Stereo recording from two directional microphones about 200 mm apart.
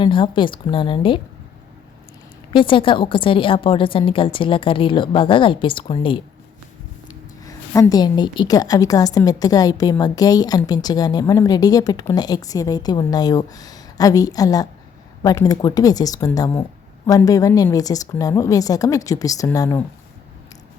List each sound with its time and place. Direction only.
0.0 s a woman's voice: 25° left (ahead or behind)
2.5 s a woman's voice: 25° left (ahead or behind)